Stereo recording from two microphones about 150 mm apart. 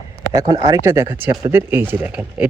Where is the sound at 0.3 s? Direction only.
25° right (ahead or behind).